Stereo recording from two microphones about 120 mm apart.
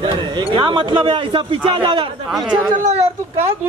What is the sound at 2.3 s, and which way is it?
Speech, centre (ahead or behind).